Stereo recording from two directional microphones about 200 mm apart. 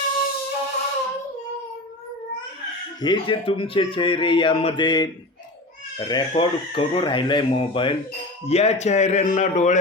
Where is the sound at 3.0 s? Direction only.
25° left (ahead or behind).